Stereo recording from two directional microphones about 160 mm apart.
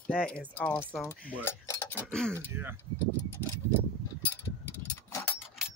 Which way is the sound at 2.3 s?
15° right (ahead or behind).